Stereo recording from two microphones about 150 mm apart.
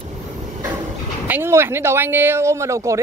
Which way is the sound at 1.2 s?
15° right (ahead or behind).